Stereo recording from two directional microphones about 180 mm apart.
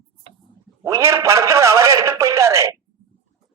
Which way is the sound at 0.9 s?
15° right (ahead or behind).